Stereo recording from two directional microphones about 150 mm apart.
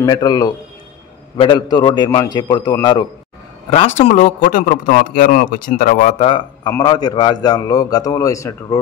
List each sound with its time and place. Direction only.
0.0 s speech: 25° left (ahead or behind)
3.7 s speech: 45° left (ahead or behind)
4.4 s a man's voice: 65° left (ahead or behind)
6.1 s speech: 35° left (ahead or behind)
6.8 s speech: 25° left (ahead or behind)